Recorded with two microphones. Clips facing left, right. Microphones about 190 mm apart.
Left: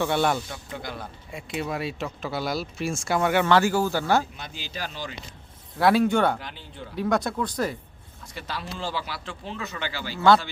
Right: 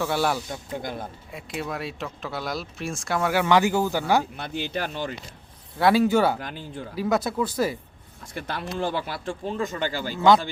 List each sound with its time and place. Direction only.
0.0 s speech: 5° right (ahead or behind)
0.5 s speech: 45° right (ahead or behind)
1.3 s speech: centre (ahead or behind)
3.4 s speech: 15° right (ahead or behind)
4.4 s speech: 60° right (ahead or behind)
5.7 s speech: centre (ahead or behind)
6.4 s speech: 45° right (ahead or behind)
6.9 s speech: 5° right (ahead or behind)
8.3 s speech: 55° right (ahead or behind)
10.2 s speech: 15° right (ahead or behind)